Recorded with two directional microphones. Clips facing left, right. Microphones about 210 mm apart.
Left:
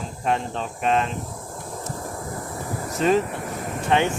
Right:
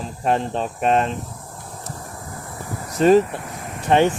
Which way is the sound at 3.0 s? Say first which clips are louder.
Right 6 dB; 40° right (ahead or behind).